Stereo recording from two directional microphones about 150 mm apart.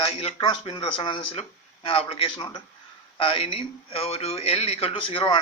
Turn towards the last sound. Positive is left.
turn(degrees=35)  # may be behind; listen again after turning